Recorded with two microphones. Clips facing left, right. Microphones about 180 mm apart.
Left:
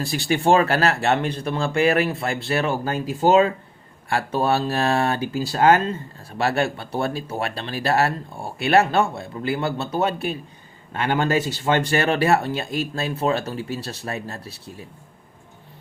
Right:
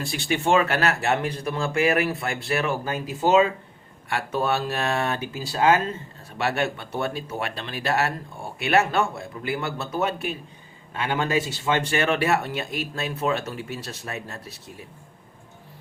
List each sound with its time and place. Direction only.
0.0 s speech: 40° left (ahead or behind)